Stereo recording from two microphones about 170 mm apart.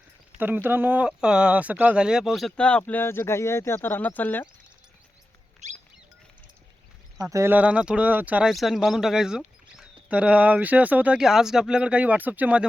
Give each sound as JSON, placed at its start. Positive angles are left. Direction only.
{"t": 0.3, "sound": "speech", "side_deg": -10}
{"t": 5.6, "sound": "rodents", "side_deg": -45}
{"t": 7.2, "sound": "speech", "side_deg": -20}